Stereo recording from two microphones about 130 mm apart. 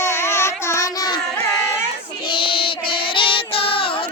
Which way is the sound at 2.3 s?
40° left (ahead or behind).